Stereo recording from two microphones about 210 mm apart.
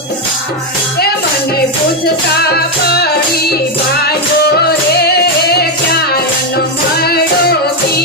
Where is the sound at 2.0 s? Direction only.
50° left (ahead or behind).